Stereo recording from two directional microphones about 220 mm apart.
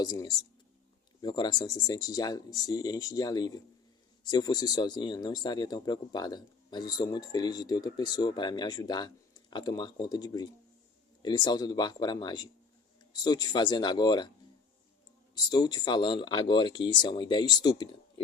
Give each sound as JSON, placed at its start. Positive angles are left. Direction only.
{"t": 0.0, "sound": "speech", "side_deg": 20}
{"t": 15.4, "sound": "speech", "side_deg": 20}